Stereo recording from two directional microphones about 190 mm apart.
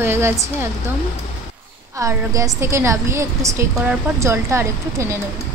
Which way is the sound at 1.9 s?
15° right (ahead or behind).